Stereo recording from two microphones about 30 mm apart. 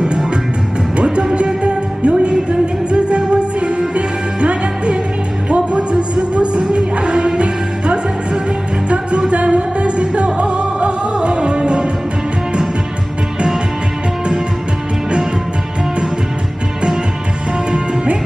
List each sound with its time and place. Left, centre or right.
0.9 s music: right
17.6 s music: right